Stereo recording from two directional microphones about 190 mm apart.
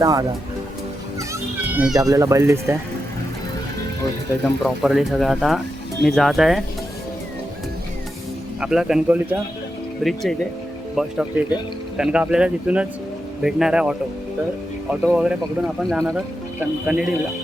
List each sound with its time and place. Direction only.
0.0 s speech: 20° right (ahead or behind)
1.3 s children playing: 10° right (ahead or behind)
2.0 s speech: 15° right (ahead or behind)
4.6 s speech: centre (ahead or behind)
8.6 s speech: 5° right (ahead or behind)
15.0 s speech: 5° right (ahead or behind)